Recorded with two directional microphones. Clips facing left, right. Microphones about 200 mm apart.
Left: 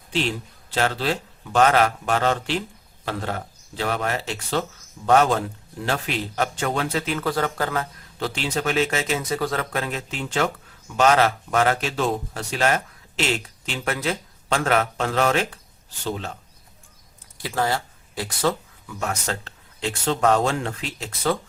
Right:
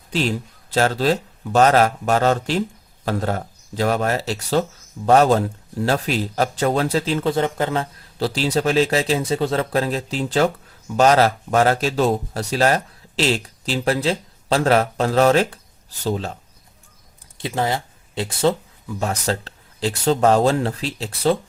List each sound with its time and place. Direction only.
0.1 s a man's voice: 40° right (ahead or behind)
17.3 s speech: 20° right (ahead or behind)